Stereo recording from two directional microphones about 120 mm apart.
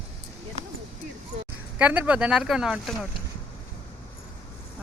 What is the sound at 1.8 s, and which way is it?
Speech, 10° right (ahead or behind).